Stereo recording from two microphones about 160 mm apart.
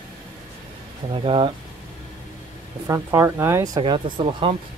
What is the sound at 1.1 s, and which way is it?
Speech, 35° right (ahead or behind).